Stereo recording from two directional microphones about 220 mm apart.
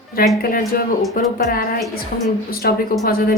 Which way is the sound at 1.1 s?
40° left (ahead or behind).